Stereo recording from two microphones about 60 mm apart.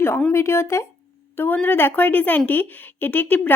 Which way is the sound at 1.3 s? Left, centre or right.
Left.